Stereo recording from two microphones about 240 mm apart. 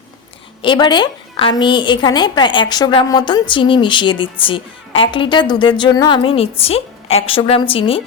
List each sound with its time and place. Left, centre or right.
0.6 s a woman's voice: centre